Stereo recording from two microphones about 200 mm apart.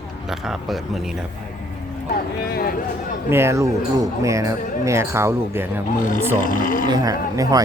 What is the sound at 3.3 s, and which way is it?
Speech, 15° right (ahead or behind).